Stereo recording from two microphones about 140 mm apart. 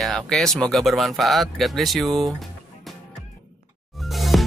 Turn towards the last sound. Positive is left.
turn(degrees=0)  # may be behind; listen again after turning